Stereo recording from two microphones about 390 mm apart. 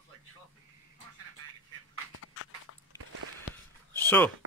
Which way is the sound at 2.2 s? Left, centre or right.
Left.